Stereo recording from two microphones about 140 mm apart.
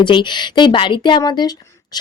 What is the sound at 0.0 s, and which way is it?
Speech, 35° left (ahead or behind).